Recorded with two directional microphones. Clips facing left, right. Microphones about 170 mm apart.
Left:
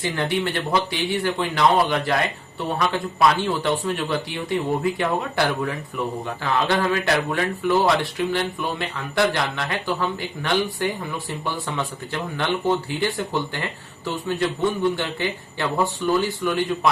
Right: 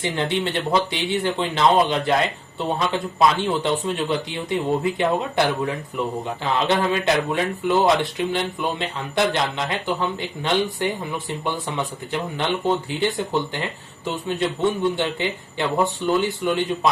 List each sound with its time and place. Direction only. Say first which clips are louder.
0.0 s speech: even; 20° right (ahead or behind)